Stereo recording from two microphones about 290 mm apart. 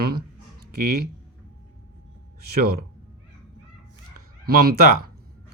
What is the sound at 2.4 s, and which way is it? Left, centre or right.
Speech, right.